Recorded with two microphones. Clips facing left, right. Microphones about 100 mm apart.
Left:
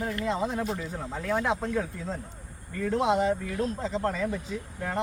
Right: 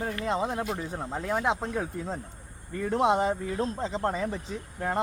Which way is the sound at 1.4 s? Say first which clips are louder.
Even; 25° right (ahead or behind).